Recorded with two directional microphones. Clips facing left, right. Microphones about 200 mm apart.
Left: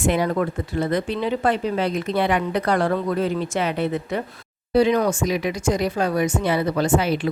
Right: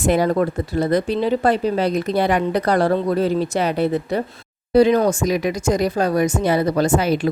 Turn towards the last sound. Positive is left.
turn(degrees=-40)  # may be behind; listen again after turning